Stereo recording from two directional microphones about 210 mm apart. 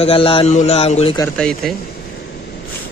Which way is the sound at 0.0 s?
25° left (ahead or behind).